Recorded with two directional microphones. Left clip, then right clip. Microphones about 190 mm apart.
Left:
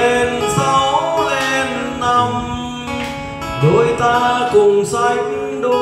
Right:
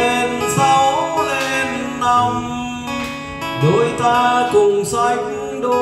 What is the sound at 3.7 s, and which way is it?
Music, 15° right (ahead or behind).